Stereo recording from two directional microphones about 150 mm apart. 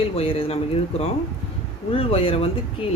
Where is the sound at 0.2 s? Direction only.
40° left (ahead or behind).